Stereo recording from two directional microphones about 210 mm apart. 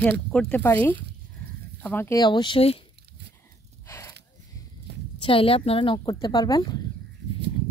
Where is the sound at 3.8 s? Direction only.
15° left (ahead or behind).